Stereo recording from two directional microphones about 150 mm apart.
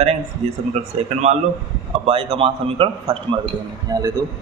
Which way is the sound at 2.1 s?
40° right (ahead or behind).